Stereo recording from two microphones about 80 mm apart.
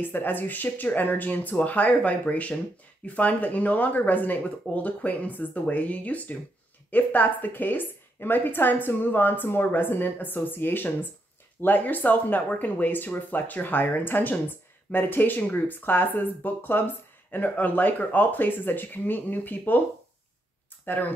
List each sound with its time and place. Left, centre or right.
0.0 s speech: left
20.8 s speech: left